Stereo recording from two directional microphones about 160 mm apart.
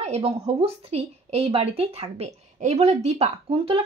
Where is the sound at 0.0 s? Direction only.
40° right (ahead or behind).